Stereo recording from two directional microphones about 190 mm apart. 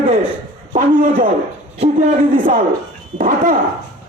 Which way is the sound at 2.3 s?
45° right (ahead or behind).